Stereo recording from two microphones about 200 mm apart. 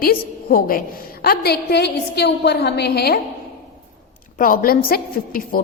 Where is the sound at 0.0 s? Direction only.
50° left (ahead or behind).